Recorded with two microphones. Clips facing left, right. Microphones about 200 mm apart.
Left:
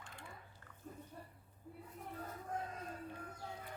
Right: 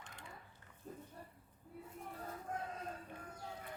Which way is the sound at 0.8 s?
35° right (ahead or behind).